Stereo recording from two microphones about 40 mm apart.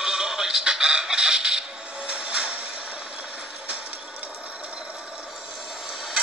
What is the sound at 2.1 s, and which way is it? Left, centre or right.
Music, right.